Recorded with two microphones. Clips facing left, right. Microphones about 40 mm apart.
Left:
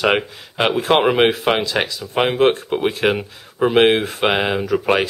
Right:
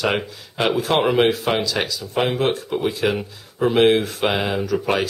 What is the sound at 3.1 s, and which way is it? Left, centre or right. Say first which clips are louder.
Speech: left 3 dB; left.